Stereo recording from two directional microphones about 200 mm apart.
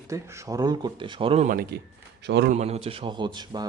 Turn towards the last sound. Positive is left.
turn(degrees=-20)  # may be behind; listen again after turning